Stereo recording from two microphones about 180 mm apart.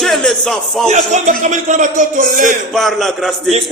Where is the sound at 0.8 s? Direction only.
40° right (ahead or behind).